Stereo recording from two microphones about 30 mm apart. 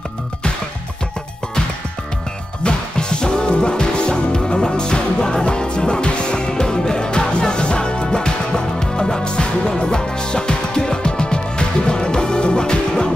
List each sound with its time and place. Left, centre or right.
2.6 s music: left